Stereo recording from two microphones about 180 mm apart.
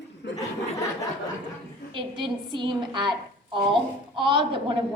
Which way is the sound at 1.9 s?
25° right (ahead or behind).